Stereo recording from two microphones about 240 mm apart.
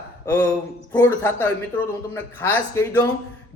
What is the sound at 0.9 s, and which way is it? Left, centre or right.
A man's voice, centre.